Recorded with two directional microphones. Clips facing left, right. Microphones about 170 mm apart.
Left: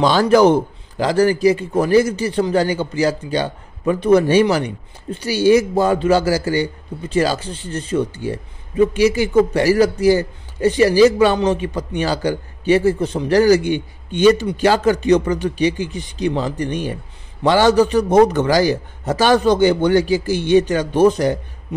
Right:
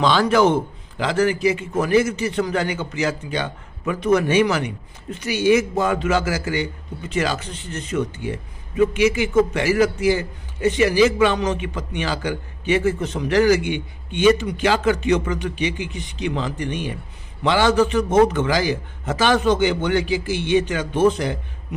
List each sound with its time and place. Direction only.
0.0 s a man's voice: 40° left (ahead or behind)